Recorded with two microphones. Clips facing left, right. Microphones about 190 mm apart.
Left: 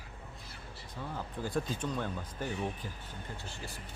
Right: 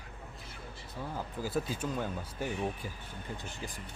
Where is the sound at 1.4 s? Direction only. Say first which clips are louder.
Even; 5° right (ahead or behind).